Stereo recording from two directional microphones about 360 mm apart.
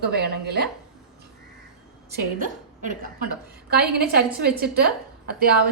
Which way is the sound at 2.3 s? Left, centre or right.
Right.